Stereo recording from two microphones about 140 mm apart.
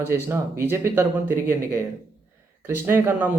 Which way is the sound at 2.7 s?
15° right (ahead or behind).